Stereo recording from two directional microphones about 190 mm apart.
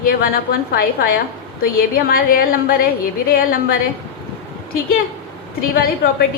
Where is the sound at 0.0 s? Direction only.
50° left (ahead or behind).